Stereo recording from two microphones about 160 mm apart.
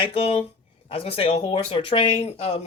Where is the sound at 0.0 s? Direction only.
40° left (ahead or behind).